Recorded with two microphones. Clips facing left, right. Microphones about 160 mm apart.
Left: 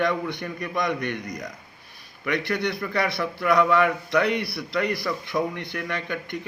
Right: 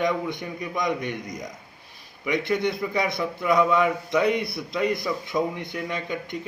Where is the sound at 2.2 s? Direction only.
20° right (ahead or behind).